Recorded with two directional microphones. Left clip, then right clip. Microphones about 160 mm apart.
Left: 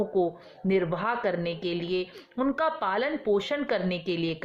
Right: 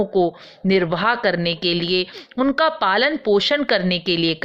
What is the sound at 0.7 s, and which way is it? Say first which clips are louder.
Speech: right 8 dB; 40° right (ahead or behind).